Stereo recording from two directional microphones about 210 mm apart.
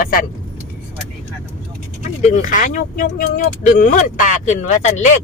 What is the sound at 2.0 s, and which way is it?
Speech, 35° left (ahead or behind).